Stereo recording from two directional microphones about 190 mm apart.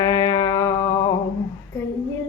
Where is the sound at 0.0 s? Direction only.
20° left (ahead or behind).